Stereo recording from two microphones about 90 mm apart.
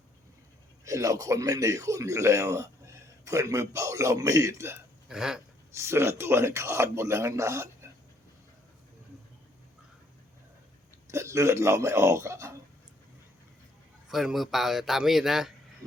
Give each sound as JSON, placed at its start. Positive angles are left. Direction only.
{"t": 0.9, "sound": "speech", "side_deg": -35}
{"t": 5.0, "sound": "a sound", "side_deg": -5}
{"t": 5.7, "sound": "speech", "side_deg": -30}
{"t": 11.1, "sound": "speech", "side_deg": -30}
{"t": 14.1, "sound": "a man's voice", "side_deg": -5}